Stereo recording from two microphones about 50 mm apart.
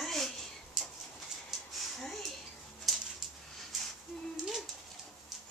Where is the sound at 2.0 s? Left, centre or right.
Centre.